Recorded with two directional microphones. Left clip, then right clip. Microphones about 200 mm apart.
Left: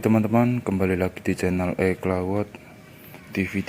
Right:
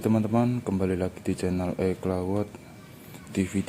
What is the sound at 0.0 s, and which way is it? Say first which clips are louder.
Speech: left 4 dB; 20° left (ahead or behind).